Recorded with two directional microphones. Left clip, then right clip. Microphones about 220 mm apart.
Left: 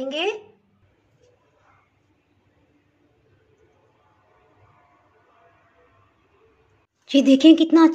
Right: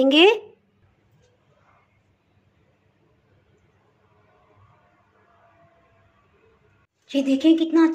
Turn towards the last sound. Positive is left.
turn(degrees=50)  # may be behind; listen again after turning